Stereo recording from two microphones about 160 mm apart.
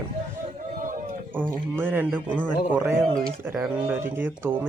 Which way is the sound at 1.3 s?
10° right (ahead or behind).